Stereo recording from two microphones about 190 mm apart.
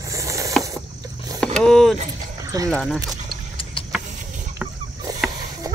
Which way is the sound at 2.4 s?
20° right (ahead or behind).